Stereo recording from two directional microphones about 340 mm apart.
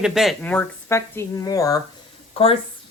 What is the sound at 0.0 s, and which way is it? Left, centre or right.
Speech, centre.